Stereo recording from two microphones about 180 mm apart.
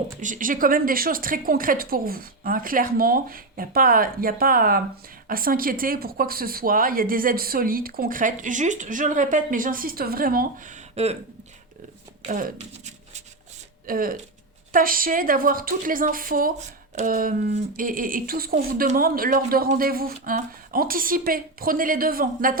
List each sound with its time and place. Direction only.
0.2 s a woman's voice: 45° right (ahead or behind)
12.2 s a woman's voice: 45° right (ahead or behind)
13.8 s a woman's voice: 50° right (ahead or behind)